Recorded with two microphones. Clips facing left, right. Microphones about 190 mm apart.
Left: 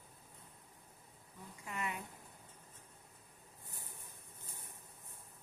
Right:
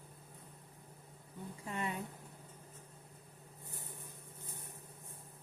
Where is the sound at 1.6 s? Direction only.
30° right (ahead or behind).